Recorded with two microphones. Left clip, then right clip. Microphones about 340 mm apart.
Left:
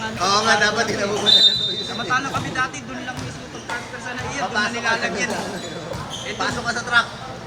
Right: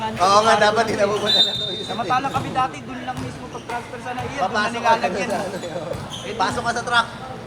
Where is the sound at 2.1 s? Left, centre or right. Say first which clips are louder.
Right 1 dB; centre.